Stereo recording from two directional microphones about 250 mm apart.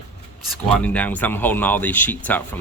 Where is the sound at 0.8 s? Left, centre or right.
Centre.